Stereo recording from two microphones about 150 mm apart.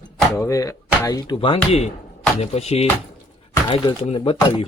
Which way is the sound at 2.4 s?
45° left (ahead or behind).